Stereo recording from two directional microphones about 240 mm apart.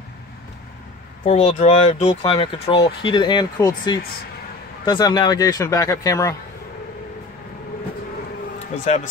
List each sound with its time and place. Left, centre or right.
1.2 s a man's voice: left
8.7 s speech: left